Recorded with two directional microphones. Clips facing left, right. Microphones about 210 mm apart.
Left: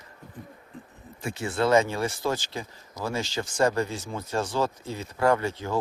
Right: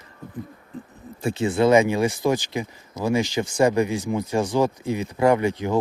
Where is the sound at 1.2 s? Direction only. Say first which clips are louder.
Right 6 dB; 25° right (ahead or behind).